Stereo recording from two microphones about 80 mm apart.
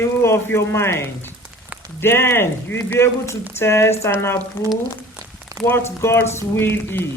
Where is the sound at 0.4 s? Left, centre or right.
Left.